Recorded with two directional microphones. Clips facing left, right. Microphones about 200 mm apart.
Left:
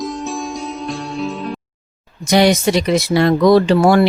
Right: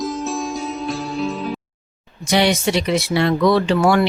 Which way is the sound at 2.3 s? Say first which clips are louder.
Left 4 dB; 40° left (ahead or behind).